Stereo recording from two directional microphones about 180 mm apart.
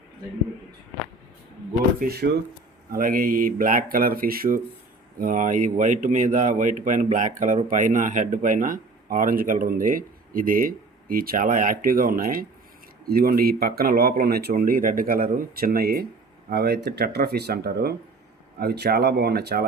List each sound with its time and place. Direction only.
2.0 s speech: 60° right (ahead or behind)